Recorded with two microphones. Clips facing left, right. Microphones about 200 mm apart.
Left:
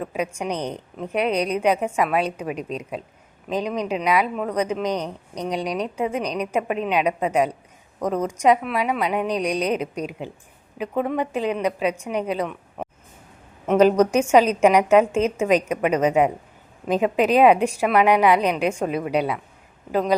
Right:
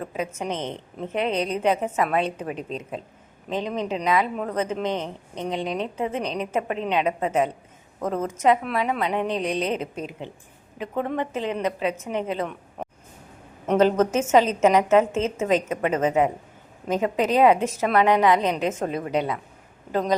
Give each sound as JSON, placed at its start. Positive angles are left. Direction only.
{"t": 0.0, "sound": "a woman's voice", "side_deg": 15}
{"t": 0.7, "sound": "a woman's voice", "side_deg": 0}
{"t": 1.2, "sound": "a woman's voice", "side_deg": -25}
{"t": 1.6, "sound": "a woman's voice", "side_deg": 10}
{"t": 2.6, "sound": "a woman's voice", "side_deg": -30}
{"t": 3.5, "sound": "a woman's voice", "side_deg": 10}
{"t": 4.7, "sound": "a woman's voice", "side_deg": -25}
{"t": 5.5, "sound": "a woman's voice", "side_deg": 10}
{"t": 6.2, "sound": "a woman's voice", "side_deg": -25}
{"t": 6.5, "sound": "a woman's voice", "side_deg": 15}
{"t": 9.2, "sound": "a woman's voice", "side_deg": -25}
{"t": 9.6, "sound": "a woman's voice", "side_deg": 15}
{"t": 14.0, "sound": "a woman's voice", "side_deg": 15}